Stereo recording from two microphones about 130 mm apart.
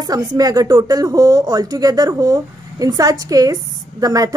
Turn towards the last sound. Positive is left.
turn(degrees=-30)  # may be behind; listen again after turning